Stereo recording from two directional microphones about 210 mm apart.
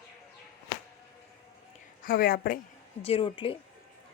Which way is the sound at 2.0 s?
40° left (ahead or behind).